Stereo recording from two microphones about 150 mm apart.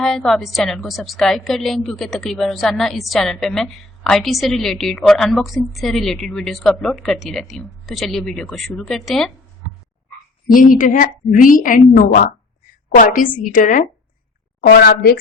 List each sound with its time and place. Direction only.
0.0 s a woman's voice: centre (ahead or behind)
10.5 s a woman's voice: 65° left (ahead or behind)
14.6 s a woman's voice: 90° left